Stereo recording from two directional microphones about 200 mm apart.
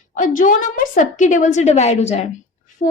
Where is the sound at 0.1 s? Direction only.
40° left (ahead or behind).